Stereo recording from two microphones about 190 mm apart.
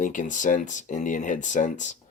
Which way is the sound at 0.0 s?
40° left (ahead or behind).